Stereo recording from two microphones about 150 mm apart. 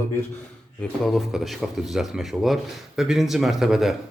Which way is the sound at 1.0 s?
Centre (ahead or behind).